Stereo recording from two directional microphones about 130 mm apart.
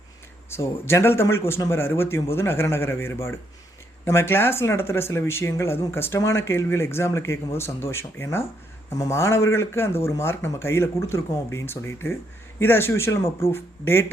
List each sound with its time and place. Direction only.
0.5 s speech: 20° left (ahead or behind)